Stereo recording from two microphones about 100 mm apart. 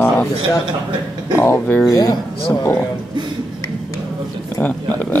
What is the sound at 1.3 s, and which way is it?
Speech, 25° left (ahead or behind).